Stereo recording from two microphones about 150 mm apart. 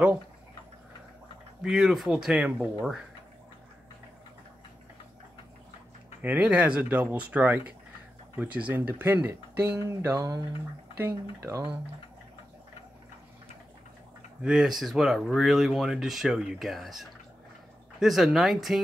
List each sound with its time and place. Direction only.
1.6 s speech: 5° right (ahead or behind)
6.2 s speech: 10° right (ahead or behind)
14.4 s speech: 5° right (ahead or behind)